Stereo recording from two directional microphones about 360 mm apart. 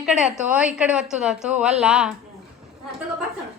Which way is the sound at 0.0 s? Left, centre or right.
Centre.